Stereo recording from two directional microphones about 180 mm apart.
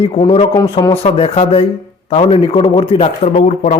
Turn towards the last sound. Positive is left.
turn(degrees=35)  # may be behind; listen again after turning